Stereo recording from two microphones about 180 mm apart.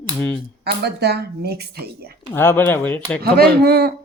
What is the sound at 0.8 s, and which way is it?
Speech, 65° right (ahead or behind).